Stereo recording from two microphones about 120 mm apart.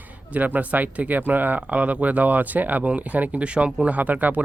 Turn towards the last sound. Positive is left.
turn(degrees=-15)  # may be behind; listen again after turning